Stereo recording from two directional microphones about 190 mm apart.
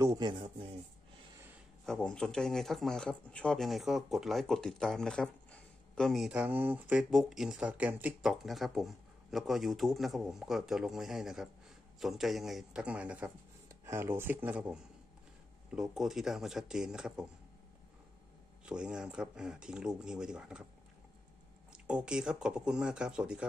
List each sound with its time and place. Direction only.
0.0 s speech: 20° right (ahead or behind)
1.9 s a man's voice: 5° left (ahead or behind)
18.7 s a man's voice: 5° right (ahead or behind)
21.8 s a man's voice: 5° right (ahead or behind)